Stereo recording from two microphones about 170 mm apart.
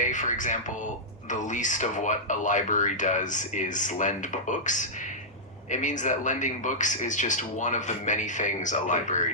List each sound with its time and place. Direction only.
0.0 s a man's voice: 45° left (ahead or behind)